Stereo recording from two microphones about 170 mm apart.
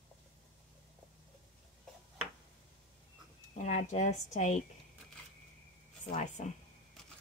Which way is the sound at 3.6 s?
40° left (ahead or behind).